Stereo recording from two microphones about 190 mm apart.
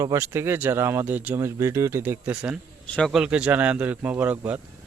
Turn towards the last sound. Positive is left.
turn(degrees=-10)  # may be behind; listen again after turning